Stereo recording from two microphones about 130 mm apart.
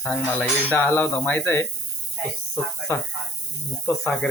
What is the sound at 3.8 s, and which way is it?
Speech, 15° left (ahead or behind).